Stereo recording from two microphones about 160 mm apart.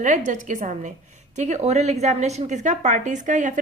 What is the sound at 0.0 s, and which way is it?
A woman's voice, 50° right (ahead or behind).